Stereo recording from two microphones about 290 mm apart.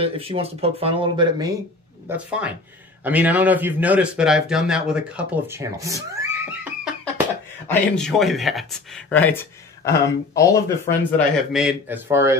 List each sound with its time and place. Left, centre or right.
0.0 s speech: centre
2.0 s speech: centre
7.6 s speech: centre
11.1 s speech: centre